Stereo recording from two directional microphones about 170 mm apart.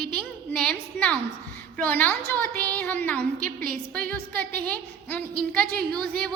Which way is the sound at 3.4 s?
55° right (ahead or behind).